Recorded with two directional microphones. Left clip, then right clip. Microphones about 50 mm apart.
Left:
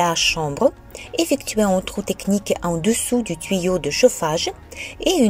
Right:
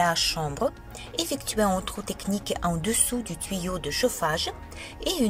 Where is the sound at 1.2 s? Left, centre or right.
Left.